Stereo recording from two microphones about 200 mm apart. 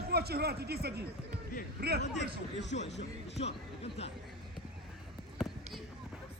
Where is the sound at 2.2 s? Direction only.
60° left (ahead or behind).